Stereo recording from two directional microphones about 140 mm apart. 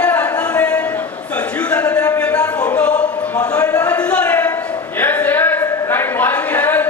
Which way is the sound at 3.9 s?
10° left (ahead or behind).